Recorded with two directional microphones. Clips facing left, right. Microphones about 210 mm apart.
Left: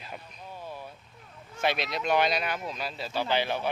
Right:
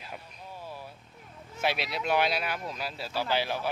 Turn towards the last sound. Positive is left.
turn(degrees=-5)  # may be behind; listen again after turning